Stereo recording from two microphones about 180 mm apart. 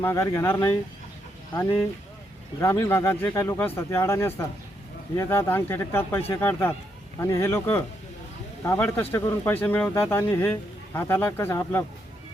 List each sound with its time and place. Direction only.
0.0 s speech: 15° left (ahead or behind)
2.6 s speech: 15° left (ahead or behind)